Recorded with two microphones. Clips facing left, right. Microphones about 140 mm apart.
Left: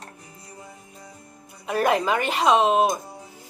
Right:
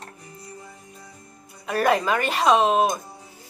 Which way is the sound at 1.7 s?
15° left (ahead or behind).